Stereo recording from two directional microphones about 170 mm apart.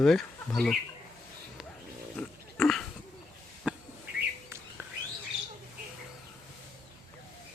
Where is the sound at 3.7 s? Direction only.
10° right (ahead or behind).